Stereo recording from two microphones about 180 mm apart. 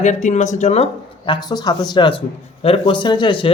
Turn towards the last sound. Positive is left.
turn(degrees=25)  # may be behind; listen again after turning